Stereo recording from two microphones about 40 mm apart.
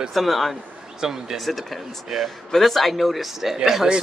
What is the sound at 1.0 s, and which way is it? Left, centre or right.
Speech, centre.